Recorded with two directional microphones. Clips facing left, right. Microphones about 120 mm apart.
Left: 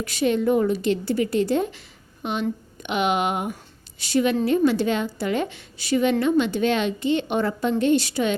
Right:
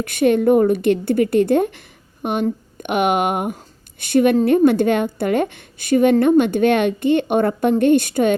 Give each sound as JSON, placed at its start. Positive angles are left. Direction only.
{"t": 0.0, "sound": "a woman's voice", "side_deg": -55}